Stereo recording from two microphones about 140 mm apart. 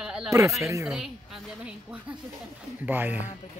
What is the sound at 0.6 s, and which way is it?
Speech, 20° right (ahead or behind).